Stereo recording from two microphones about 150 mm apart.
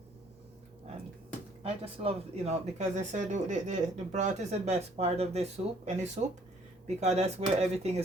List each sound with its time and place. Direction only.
1.6 s speech: 40° right (ahead or behind)